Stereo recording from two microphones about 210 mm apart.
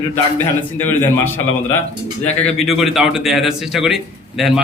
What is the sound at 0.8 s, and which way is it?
Speech, 10° left (ahead or behind).